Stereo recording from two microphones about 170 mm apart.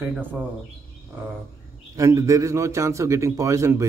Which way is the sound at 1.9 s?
20° right (ahead or behind).